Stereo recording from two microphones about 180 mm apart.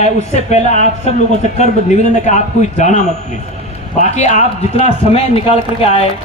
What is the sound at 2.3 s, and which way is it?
A man's voice, 40° left (ahead or behind).